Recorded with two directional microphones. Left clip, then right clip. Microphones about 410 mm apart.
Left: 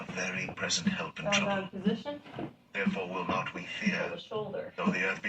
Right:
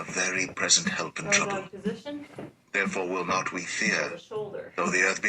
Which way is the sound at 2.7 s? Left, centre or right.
Right.